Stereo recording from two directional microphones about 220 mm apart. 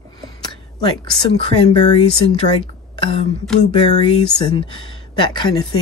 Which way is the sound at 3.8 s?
25° left (ahead or behind).